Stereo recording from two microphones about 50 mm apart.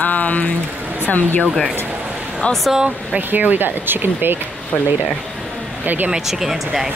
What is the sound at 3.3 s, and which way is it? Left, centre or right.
Speech, right.